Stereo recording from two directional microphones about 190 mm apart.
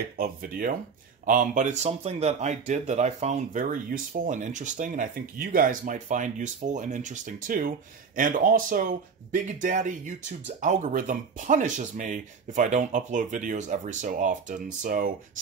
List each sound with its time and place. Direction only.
0.2 s speech: 50° right (ahead or behind)